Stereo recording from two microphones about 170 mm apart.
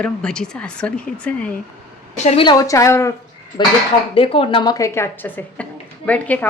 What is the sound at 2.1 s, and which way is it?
A woman's voice, 40° left (ahead or behind).